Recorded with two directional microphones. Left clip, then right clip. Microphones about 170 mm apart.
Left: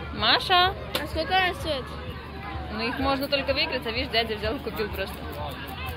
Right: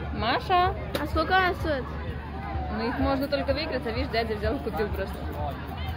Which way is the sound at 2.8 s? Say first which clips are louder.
Left 1 dB; 10° right (ahead or behind).